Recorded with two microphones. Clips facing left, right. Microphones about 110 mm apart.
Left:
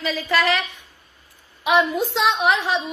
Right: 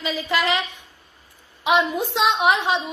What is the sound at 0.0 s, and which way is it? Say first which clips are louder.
A woman's voice: left 2 dB; 20° right (ahead or behind).